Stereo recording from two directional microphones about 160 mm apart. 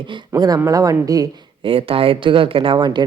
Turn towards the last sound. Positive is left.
turn(degrees=-25)  # may be behind; listen again after turning